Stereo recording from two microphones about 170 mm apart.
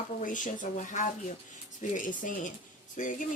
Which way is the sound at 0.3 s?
50° left (ahead or behind).